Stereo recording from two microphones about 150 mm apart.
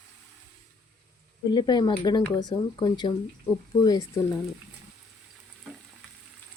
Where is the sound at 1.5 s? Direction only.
30° left (ahead or behind).